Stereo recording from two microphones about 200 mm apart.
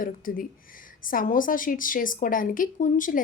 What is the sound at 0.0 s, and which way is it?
A woman's voice, 45° left (ahead or behind).